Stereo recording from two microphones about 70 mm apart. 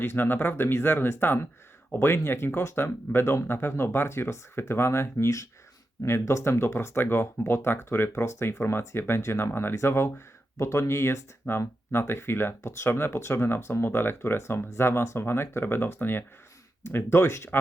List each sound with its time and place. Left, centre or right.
0.0 s speech: left